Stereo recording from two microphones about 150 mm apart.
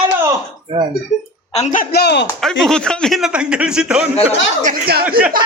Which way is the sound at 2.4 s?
5° left (ahead or behind).